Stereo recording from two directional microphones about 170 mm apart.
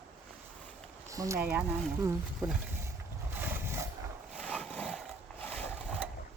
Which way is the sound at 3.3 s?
10° right (ahead or behind).